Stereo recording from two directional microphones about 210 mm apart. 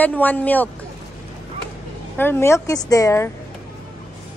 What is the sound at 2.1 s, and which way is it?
A woman's voice, 10° left (ahead or behind).